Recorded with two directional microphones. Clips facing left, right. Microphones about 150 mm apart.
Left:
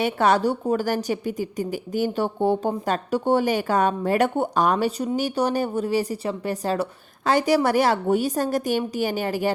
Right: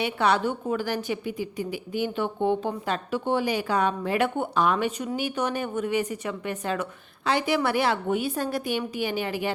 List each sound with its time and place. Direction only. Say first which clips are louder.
0.0 s a woman's voice: left 4 dB; 45° left (ahead or behind)